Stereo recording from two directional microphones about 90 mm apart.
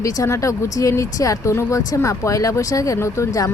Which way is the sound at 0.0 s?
35° left (ahead or behind).